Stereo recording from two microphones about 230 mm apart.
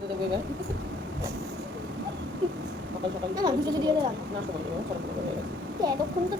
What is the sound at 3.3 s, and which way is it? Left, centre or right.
Speech, centre.